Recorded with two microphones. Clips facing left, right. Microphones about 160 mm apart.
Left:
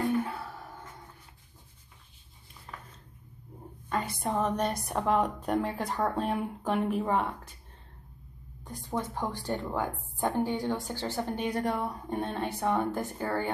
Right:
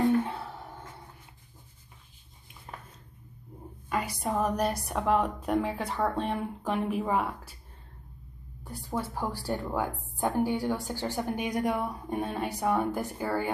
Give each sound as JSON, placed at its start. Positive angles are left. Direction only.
{"t": 0.2, "sound": "a sound", "side_deg": -25}
{"t": 4.2, "sound": "a woman's voice", "side_deg": -5}
{"t": 8.6, "sound": "a woman's voice", "side_deg": -10}